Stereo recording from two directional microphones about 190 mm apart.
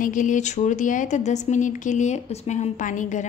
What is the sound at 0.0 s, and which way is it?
A woman's voice, 45° left (ahead or behind).